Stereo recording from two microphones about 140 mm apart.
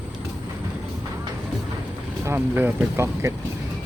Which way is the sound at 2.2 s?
15° right (ahead or behind).